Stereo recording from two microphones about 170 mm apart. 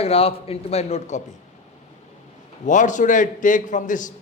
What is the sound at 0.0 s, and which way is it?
A man's voice, 35° left (ahead or behind).